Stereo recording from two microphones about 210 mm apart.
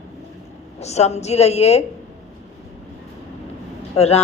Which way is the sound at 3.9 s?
30° left (ahead or behind).